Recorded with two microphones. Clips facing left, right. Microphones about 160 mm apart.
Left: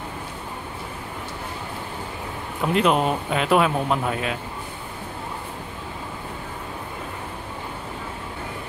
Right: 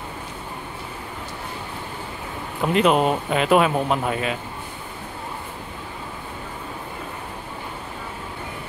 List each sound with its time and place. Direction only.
2.6 s speech: centre (ahead or behind)